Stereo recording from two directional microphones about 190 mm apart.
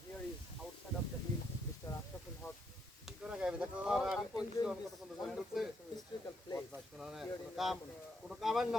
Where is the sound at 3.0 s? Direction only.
5° right (ahead or behind).